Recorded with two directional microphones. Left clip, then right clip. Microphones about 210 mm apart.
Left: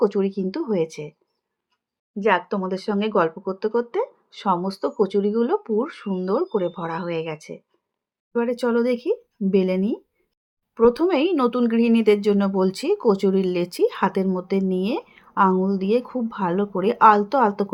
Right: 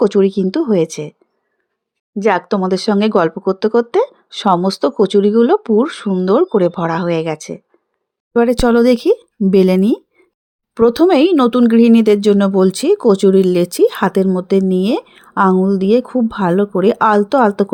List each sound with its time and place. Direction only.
0.0 s speech: 45° right (ahead or behind)
2.1 s speech: 50° right (ahead or behind)